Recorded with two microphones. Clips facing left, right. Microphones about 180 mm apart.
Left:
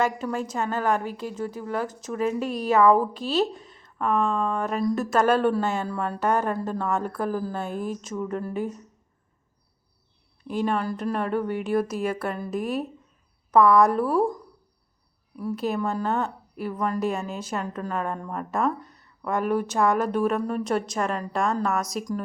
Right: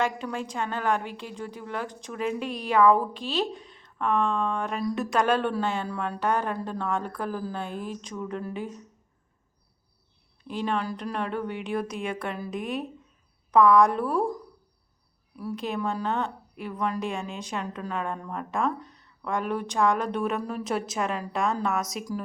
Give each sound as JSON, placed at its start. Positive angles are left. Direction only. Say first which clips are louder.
{"t": 0.0, "sound": "a woman's voice", "louder": "left 3 dB", "side_deg": 5}
{"t": 1.0, "sound": "a woman's voice", "louder": "left 5 dB", "side_deg": 40}
{"t": 3.5, "sound": "a sound", "louder": "right 1 dB", "side_deg": 45}
{"t": 3.8, "sound": "a woman's voice", "louder": "left 2 dB", "side_deg": 5}
{"t": 6.3, "sound": "a woman's voice", "louder": "left 3 dB", "side_deg": 45}
{"t": 7.3, "sound": "speech", "louder": "left 4 dB", "side_deg": 5}
{"t": 7.6, "sound": "a woman's voice", "louder": "left 4 dB", "side_deg": 45}
{"t": 8.0, "sound": "speech", "louder": "left 4 dB", "side_deg": 5}
{"t": 8.5, "sound": "a woman's voice", "louder": "left 5 dB", "side_deg": 45}
{"t": 10.4, "sound": "speech", "louder": "left 5 dB", "side_deg": 45}
{"t": 10.7, "sound": "a woman's voice", "louder": "left 1 dB", "side_deg": 5}
{"t": 15.4, "sound": "speech", "louder": "left 4 dB", "side_deg": 0}